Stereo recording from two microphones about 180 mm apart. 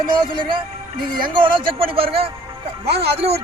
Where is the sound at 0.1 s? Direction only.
25° right (ahead or behind).